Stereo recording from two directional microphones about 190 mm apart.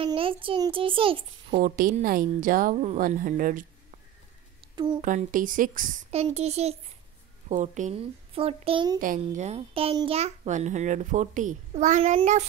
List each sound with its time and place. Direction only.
0.0 s a child's voice: 30° right (ahead or behind)
1.6 s a woman's voice: 45° right (ahead or behind)
5.0 s a child's voice: 45° right (ahead or behind); by 9.0 s 25° right (ahead or behind)
9.0 s a child's voice: 45° right (ahead or behind)